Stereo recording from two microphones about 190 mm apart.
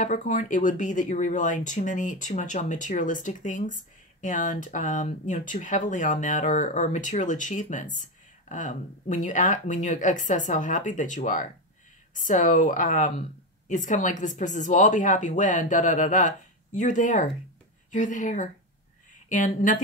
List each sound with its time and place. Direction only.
0.0 s speech: 40° left (ahead or behind)